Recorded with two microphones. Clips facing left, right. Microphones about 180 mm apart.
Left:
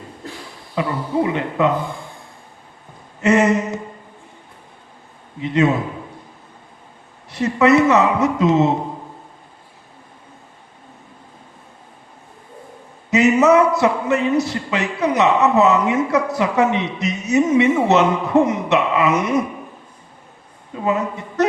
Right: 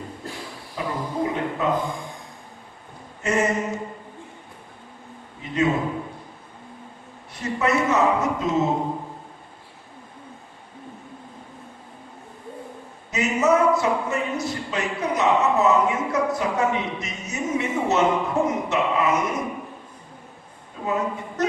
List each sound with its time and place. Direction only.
0.8 s a man's voice: 75° left (ahead or behind)
3.2 s a man's voice: 75° left (ahead or behind)
5.4 s a man's voice: 75° left (ahead or behind)
7.3 s a man's voice: 75° left (ahead or behind)
13.1 s a man's voice: 75° left (ahead or behind)
20.7 s a man's voice: 70° left (ahead or behind)